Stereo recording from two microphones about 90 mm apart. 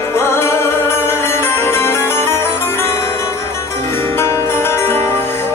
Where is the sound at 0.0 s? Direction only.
30° left (ahead or behind).